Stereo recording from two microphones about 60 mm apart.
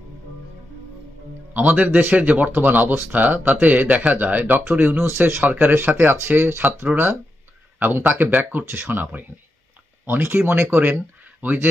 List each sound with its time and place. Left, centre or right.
1.5 s speech: right
8.1 s speech: right